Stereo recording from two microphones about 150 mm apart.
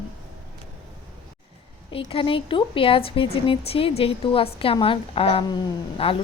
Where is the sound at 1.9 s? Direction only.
35° left (ahead or behind).